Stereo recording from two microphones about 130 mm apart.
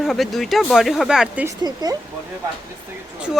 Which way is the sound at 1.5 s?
30° right (ahead or behind).